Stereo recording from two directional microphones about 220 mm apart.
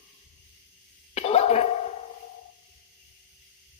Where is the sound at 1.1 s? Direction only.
30° left (ahead or behind).